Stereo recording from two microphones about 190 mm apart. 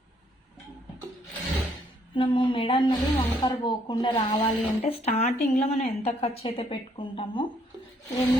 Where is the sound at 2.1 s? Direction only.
25° left (ahead or behind).